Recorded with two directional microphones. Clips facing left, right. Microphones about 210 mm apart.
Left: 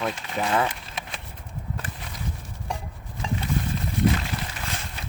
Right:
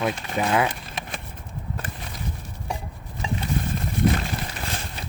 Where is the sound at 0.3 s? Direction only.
10° right (ahead or behind).